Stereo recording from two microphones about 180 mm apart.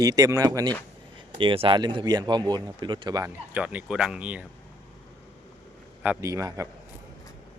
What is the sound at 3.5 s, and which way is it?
Speech, 10° right (ahead or behind).